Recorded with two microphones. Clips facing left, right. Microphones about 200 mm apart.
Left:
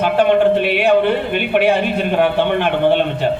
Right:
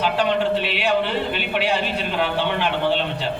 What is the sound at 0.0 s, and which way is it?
Speech, 55° left (ahead or behind).